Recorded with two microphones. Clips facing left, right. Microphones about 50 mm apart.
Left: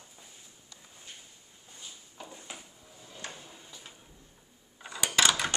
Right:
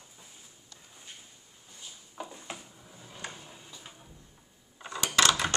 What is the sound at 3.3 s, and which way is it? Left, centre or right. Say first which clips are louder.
Tick-tock: even; centre.